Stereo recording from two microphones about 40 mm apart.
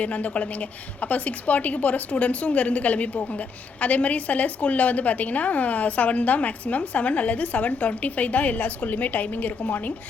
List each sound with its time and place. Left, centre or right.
0.0 s a woman's voice: left